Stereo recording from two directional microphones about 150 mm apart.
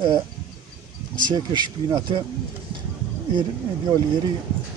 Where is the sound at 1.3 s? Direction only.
30° right (ahead or behind).